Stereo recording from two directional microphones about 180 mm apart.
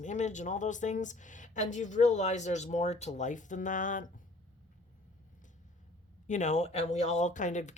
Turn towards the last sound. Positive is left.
turn(degrees=40)  # may be behind; listen again after turning